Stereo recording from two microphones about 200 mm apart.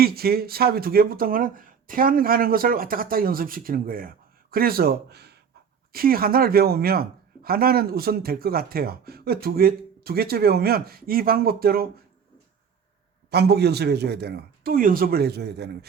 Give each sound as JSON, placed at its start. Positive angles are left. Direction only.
{"t": 0.0, "sound": "speech", "side_deg": -50}
{"t": 13.3, "sound": "speech", "side_deg": -55}